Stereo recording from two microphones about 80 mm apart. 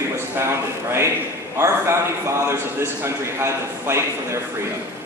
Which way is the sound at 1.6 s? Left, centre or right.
Right.